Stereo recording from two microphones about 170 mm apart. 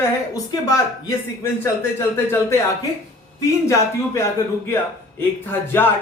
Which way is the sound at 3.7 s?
15° left (ahead or behind).